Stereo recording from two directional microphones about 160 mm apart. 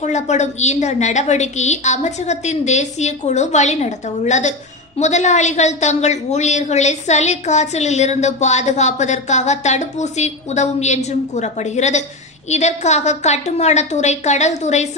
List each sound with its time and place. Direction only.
0.0 s a woman's voice: 45° left (ahead or behind)